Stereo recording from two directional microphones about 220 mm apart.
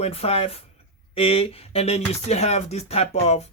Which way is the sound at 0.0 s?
25° left (ahead or behind).